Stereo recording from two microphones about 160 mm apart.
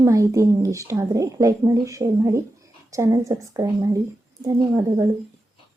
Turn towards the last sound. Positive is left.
turn(degrees=-25)  # may be behind; listen again after turning